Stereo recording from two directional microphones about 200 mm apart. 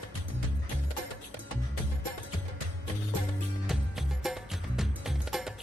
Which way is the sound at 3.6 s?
Centre (ahead or behind).